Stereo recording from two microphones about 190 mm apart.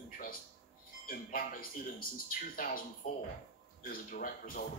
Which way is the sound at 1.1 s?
50° left (ahead or behind).